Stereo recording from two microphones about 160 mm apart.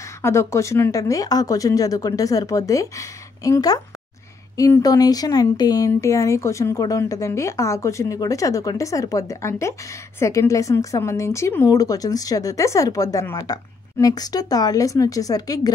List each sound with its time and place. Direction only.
0.2 s speech: 15° left (ahead or behind)